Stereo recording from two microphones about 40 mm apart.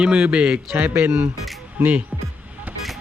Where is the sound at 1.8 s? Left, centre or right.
Right.